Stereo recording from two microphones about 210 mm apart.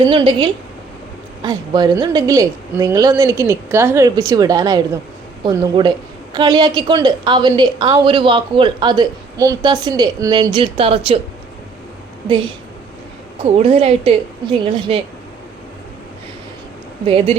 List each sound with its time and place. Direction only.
0.0 s a woman's voice: 20° right (ahead or behind)
13.4 s a woman's voice: 30° right (ahead or behind)
17.1 s a woman's voice: 25° right (ahead or behind)